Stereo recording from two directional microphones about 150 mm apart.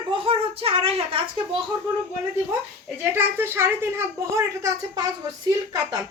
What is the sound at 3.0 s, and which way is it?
A woman's voice, 15° right (ahead or behind).